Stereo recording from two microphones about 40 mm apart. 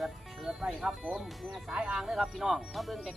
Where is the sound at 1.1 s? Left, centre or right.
Centre.